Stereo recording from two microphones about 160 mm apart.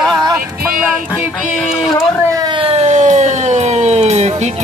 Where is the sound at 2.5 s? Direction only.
35° right (ahead or behind).